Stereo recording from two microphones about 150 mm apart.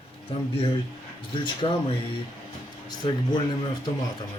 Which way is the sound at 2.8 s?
30° left (ahead or behind).